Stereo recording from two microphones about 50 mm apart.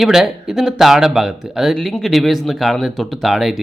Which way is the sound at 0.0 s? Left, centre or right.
Centre.